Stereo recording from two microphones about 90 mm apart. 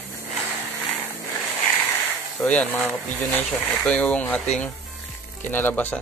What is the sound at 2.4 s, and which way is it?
Speech, 15° left (ahead or behind).